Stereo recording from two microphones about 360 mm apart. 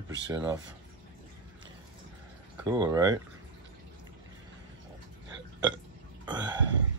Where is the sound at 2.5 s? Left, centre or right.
Centre.